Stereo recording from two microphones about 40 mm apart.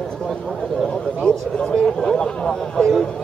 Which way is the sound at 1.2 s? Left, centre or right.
Centre.